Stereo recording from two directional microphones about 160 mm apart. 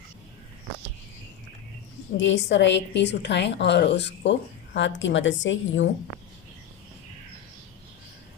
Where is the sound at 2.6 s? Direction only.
90° left.